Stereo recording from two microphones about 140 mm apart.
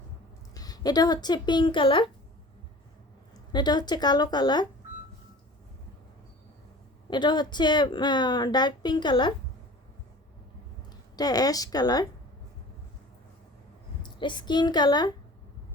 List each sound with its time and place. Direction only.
0.5 s speech: 30° left (ahead or behind)
3.5 s a woman's voice: 30° left (ahead or behind)
7.1 s a woman's voice: 35° left (ahead or behind)
11.2 s speech: 25° left (ahead or behind)
14.0 s a woman's voice: 35° left (ahead or behind)